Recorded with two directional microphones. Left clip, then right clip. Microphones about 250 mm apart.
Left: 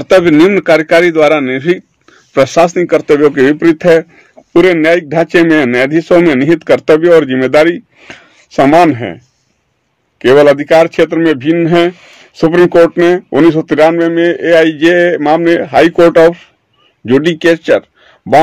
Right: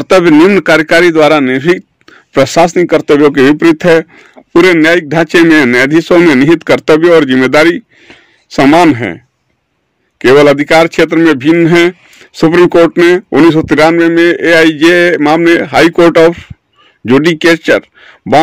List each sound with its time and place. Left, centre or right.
0.0 s a man's voice: right
8.1 s speech: centre
8.5 s a man's voice: right